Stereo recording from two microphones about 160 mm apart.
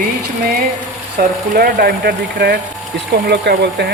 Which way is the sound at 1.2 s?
70° right (ahead or behind).